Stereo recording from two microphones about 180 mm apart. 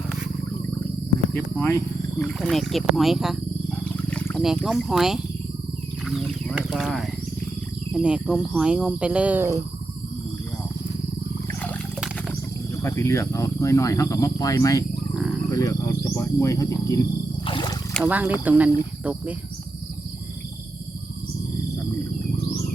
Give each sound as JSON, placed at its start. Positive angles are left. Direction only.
{"t": 1.3, "sound": "speech", "side_deg": 10}
{"t": 12.3, "sound": "speech", "side_deg": 15}
{"t": 15.1, "sound": "wild animals", "side_deg": -5}
{"t": 15.4, "sound": "speech", "side_deg": 20}
{"t": 17.4, "sound": "a sound", "side_deg": 25}
{"t": 18.0, "sound": "speech", "side_deg": -10}